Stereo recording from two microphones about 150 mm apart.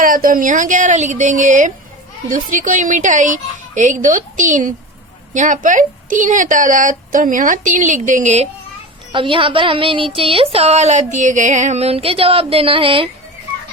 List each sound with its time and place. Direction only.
0.0 s a woman's voice: 65° right (ahead or behind)
9.1 s speech: 35° right (ahead or behind)